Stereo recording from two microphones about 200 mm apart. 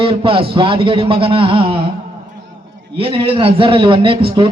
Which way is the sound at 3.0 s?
25° right (ahead or behind).